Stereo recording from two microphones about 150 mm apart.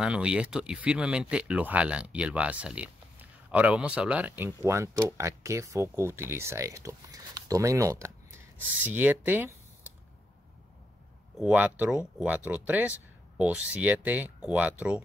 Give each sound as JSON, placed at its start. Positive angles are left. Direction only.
{"t": 0.0, "sound": "speech", "side_deg": -5}
{"t": 11.3, "sound": "speech", "side_deg": -10}